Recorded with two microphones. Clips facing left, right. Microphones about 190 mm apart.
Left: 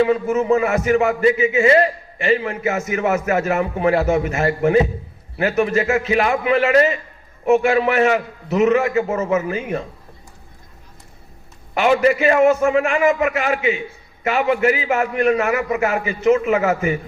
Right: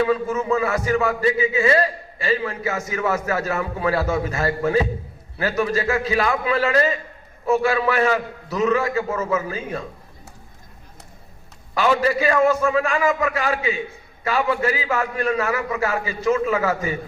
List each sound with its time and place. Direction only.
0.0 s a man's voice: 20° left (ahead or behind)
11.7 s a man's voice: 20° left (ahead or behind)